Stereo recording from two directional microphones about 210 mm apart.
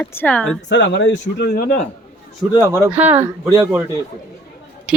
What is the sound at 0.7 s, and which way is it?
Speech, 55° left (ahead or behind).